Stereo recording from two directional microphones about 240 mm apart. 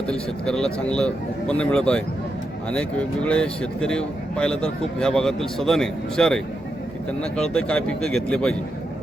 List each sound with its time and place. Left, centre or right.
0.1 s speech: centre